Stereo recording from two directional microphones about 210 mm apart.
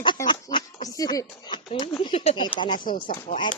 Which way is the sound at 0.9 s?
15° left (ahead or behind).